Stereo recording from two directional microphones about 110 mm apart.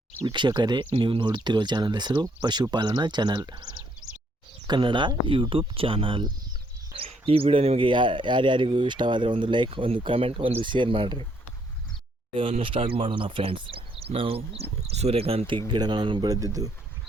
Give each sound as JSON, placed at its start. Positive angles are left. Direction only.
{"t": 0.3, "sound": "speech", "side_deg": -40}
{"t": 12.3, "sound": "speech", "side_deg": -55}
{"t": 16.3, "sound": "speech", "side_deg": -30}